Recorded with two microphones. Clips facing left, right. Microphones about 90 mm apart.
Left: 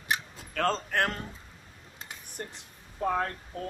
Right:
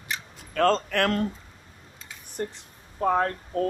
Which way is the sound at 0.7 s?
80° right.